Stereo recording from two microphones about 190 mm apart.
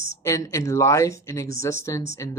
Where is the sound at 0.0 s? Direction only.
15° left (ahead or behind).